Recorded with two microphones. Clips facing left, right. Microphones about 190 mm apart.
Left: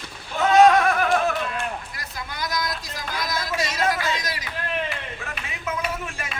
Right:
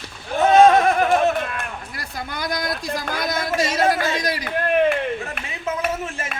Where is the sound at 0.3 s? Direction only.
30° right (ahead or behind).